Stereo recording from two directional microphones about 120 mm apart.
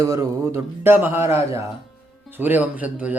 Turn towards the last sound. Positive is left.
turn(degrees=-10)  # may be behind; listen again after turning